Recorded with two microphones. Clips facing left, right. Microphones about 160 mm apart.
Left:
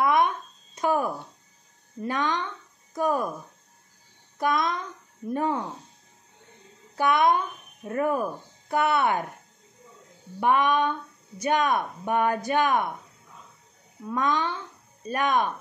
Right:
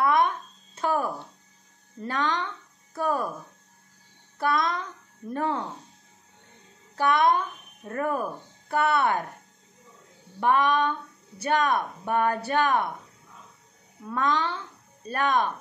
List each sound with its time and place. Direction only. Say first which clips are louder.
0.0 s a sound: even; 20° left (ahead or behind)
2.0 s speech: left 1 dB; 15° left (ahead or behind)
4.4 s a child's voice: even; 15° left (ahead or behind)
7.0 s speech: even; 15° left (ahead or behind)
10.4 s speech: even; 15° left (ahead or behind)
14.1 s speech: even; 15° left (ahead or behind)